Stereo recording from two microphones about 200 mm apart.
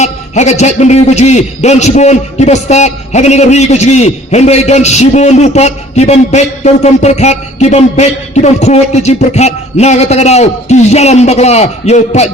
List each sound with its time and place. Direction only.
0.0 s a man's voice: 35° left (ahead or behind)